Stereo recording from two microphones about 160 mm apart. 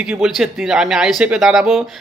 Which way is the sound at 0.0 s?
5° right (ahead or behind).